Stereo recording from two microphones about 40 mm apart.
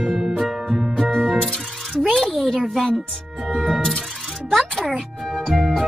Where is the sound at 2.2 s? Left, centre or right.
Centre.